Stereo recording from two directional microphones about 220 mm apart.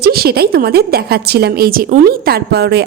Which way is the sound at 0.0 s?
45° right (ahead or behind).